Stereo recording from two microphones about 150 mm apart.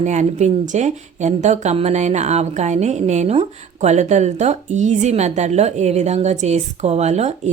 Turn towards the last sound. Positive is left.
turn(degrees=-45)  # may be behind; listen again after turning